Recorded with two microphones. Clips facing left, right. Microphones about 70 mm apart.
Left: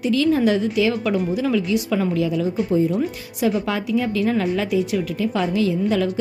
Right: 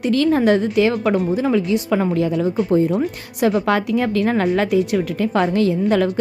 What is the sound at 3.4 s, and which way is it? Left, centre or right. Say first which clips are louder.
A woman's voice: right 4 dB; right.